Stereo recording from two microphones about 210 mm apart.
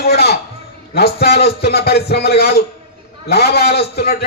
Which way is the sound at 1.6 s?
50° left (ahead or behind).